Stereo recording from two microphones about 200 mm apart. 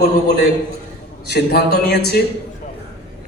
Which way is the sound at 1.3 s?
55° left (ahead or behind).